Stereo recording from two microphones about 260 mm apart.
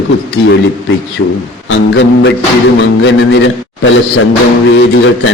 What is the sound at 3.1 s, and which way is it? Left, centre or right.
Speech, left.